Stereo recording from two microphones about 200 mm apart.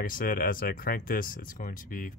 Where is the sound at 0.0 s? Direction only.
45° left (ahead or behind).